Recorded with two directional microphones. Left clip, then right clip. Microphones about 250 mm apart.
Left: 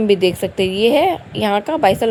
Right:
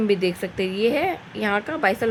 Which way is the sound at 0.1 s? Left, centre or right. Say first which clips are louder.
Left 7 dB; centre.